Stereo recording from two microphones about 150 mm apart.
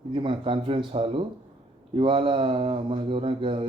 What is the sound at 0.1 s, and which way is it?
Speech, 35° right (ahead or behind).